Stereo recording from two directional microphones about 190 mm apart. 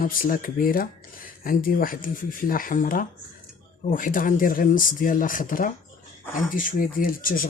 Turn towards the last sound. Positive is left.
turn(degrees=50)  # may be behind; listen again after turning